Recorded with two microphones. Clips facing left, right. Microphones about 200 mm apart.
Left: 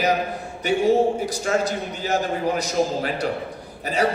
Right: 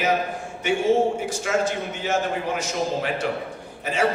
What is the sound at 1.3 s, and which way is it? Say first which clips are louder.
A man's voice: left 1 dB; 35° left (ahead or behind).